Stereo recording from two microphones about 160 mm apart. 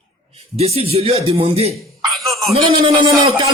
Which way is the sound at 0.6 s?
40° right (ahead or behind).